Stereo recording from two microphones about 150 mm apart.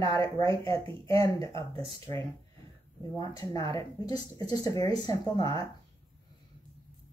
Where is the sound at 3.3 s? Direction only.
25° left (ahead or behind).